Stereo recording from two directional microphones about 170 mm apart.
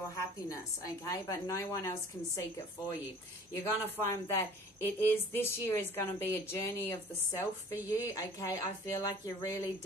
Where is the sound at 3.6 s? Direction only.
15° left (ahead or behind).